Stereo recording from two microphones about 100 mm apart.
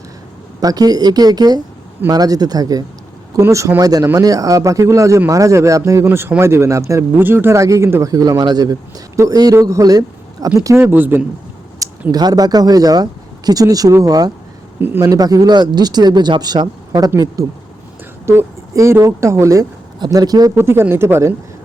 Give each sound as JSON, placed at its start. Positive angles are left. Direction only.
{"t": 0.6, "sound": "speech", "side_deg": -40}
{"t": 6.1, "sound": "speech", "side_deg": -20}
{"t": 8.1, "sound": "speech", "side_deg": -40}
{"t": 11.8, "sound": "a sound", "side_deg": -35}
{"t": 12.1, "sound": "speech", "side_deg": -40}
{"t": 14.8, "sound": "speech", "side_deg": -20}
{"t": 15.0, "sound": "speech", "side_deg": -40}
{"t": 20.6, "sound": "speech", "side_deg": -25}